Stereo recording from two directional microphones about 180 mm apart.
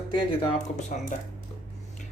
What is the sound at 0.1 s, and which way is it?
Speech, 30° left (ahead or behind).